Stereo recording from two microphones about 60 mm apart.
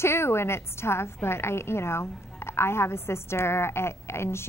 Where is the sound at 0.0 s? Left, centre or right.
Left.